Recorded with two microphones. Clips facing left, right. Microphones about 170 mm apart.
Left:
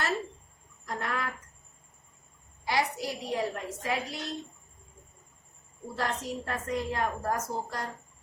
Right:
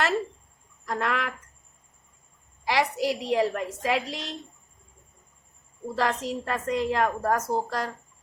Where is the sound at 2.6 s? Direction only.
90° right.